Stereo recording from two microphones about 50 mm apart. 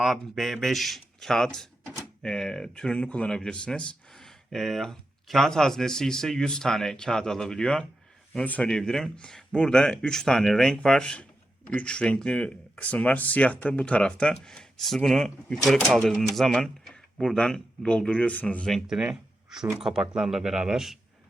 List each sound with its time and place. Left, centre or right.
0.0 s speech: centre
8.4 s speech: left
8.8 s speech: centre
17.3 s speech: left
19.8 s speech: centre